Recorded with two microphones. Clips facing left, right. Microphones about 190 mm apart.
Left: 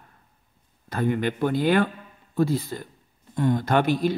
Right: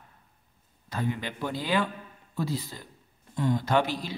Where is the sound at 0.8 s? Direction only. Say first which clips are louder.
Left 8 dB; 55° left (ahead or behind).